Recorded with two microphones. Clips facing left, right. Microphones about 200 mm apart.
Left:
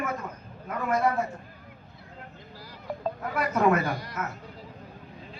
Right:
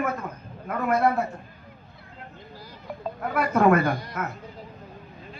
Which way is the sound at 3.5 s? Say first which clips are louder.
Right 4 dB; 55° right (ahead or behind).